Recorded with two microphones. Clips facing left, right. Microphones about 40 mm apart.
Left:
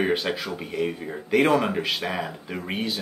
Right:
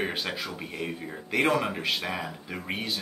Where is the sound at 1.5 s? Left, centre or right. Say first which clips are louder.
Left 4 dB; centre.